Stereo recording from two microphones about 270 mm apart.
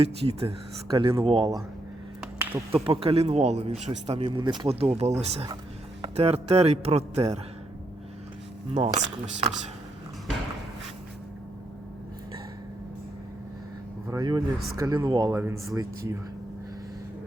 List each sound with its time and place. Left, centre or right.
0.0 s speech: right
2.7 s speech: right
8.7 s speech: right
14.1 s speech: centre